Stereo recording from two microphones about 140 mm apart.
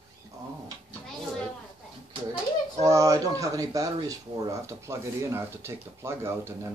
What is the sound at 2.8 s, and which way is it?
Speech, 25° right (ahead or behind).